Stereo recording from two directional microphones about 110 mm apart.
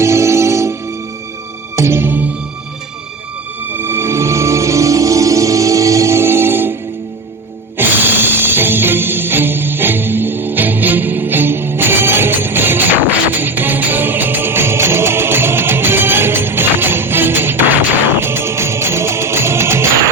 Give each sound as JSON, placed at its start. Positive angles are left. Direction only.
{"t": 0.0, "sound": "music", "side_deg": -25}
{"t": 3.8, "sound": "music", "side_deg": -20}
{"t": 7.8, "sound": "music", "side_deg": -20}